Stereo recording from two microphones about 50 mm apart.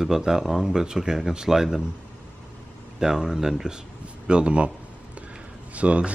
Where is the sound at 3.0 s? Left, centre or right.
Centre.